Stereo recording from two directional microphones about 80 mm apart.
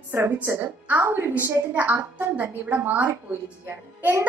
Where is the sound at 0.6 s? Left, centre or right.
Right.